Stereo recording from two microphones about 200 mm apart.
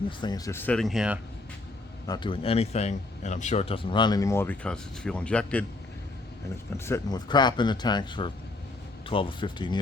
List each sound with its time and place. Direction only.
0.2 s speech: 20° left (ahead or behind); by 1.2 s 5° right (ahead or behind)
2.0 s speech: 20° left (ahead or behind); by 5.6 s 5° left (ahead or behind)
6.7 s speech: 15° left (ahead or behind)